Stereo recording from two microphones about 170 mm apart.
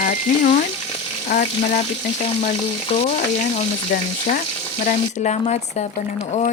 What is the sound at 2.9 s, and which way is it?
Speech, 40° left (ahead or behind).